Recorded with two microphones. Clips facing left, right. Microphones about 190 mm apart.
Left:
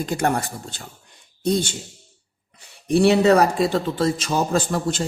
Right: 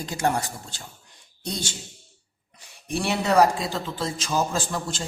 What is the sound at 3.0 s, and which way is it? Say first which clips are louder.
A man's voice: left 4 dB; 60° left (ahead or behind).